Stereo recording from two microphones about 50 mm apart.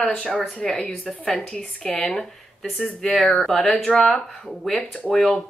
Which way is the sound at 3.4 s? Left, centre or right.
Centre.